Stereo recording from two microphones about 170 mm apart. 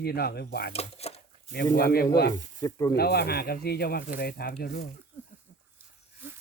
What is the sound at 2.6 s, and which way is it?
Speech, 20° left (ahead or behind).